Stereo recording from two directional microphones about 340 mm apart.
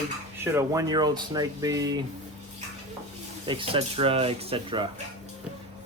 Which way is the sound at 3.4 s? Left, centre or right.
Centre.